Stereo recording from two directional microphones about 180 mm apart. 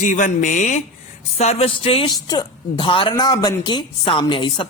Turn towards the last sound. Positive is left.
turn(degrees=25)  # may be behind; listen again after turning